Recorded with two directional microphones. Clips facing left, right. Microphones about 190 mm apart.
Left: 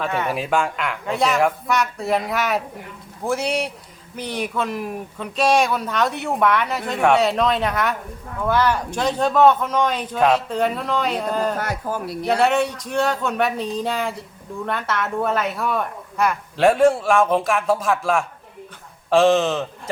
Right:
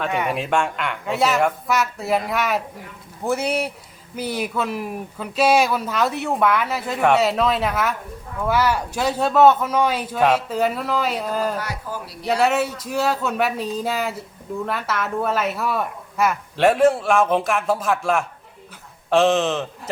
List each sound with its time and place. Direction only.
0.3 s speech: centre (ahead or behind)
11.6 s speech: 50° left (ahead or behind)
12.2 s speech: centre (ahead or behind)